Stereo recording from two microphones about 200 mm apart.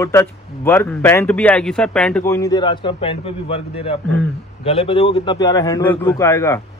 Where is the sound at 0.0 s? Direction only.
15° left (ahead or behind).